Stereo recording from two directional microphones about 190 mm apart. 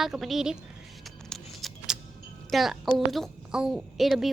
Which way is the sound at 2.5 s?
Centre (ahead or behind).